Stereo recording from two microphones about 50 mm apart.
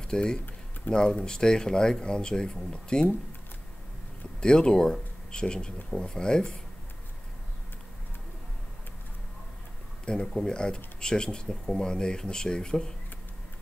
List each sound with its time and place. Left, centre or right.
0.1 s speech: centre
4.4 s speech: centre
10.0 s speech: centre